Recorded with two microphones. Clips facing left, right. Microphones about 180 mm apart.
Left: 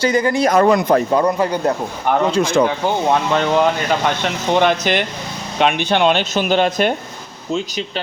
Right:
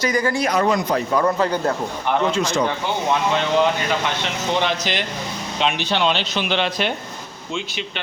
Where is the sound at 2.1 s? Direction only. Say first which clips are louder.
Left 4 dB; 45° left (ahead or behind).